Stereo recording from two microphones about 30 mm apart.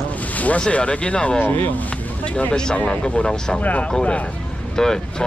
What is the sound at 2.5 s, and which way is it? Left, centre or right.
Speech, left.